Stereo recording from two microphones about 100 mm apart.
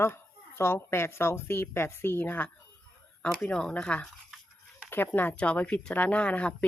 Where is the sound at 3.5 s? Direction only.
10° left (ahead or behind).